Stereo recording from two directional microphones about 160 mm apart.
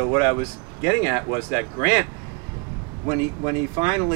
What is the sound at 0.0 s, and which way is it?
A man's voice, 20° right (ahead or behind).